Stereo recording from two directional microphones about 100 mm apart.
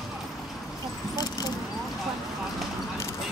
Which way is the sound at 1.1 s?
40° left (ahead or behind).